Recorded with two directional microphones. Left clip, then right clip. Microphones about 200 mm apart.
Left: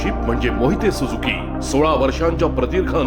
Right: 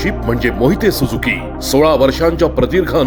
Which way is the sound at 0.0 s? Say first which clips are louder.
Right 4 dB; 25° right (ahead or behind).